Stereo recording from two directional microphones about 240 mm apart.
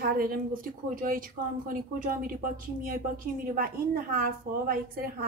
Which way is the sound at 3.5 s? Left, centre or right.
Right.